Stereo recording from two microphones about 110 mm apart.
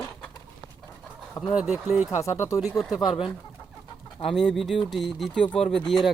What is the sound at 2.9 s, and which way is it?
Speech, 35° left (ahead or behind).